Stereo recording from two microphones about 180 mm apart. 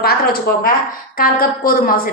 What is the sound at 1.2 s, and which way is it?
Speech, 55° left (ahead or behind).